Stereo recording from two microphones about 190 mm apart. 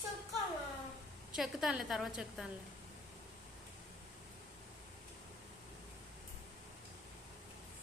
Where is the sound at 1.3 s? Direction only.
Centre (ahead or behind).